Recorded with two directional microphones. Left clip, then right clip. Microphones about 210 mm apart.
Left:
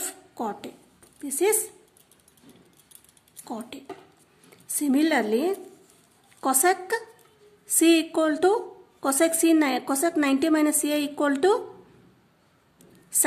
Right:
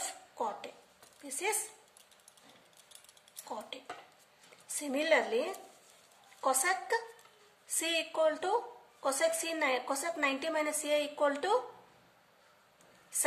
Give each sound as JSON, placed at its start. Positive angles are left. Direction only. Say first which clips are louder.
{"t": 0.0, "sound": "a sound", "louder": "left 5 dB", "side_deg": 45}
{"t": 1.2, "sound": "a woman's voice", "louder": "left 12 dB", "side_deg": 45}
{"t": 3.4, "sound": "a woman's voice", "louder": "left 6 dB", "side_deg": 45}